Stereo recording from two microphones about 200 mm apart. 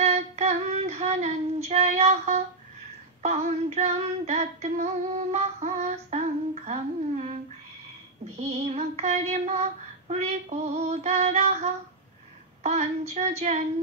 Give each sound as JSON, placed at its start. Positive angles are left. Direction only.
{"t": 0.0, "sound": "female singing", "side_deg": -35}
{"t": 8.4, "sound": "child singing", "side_deg": -35}